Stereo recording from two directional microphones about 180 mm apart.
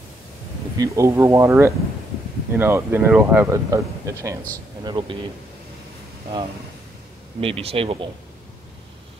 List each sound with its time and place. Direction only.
0.7 s speech: 15° right (ahead or behind)
7.3 s speech: 30° right (ahead or behind)